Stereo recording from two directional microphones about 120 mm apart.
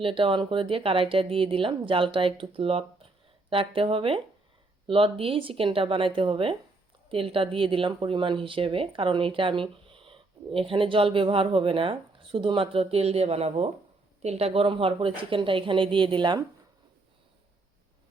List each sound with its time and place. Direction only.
0.0 s speech: 45° right (ahead or behind)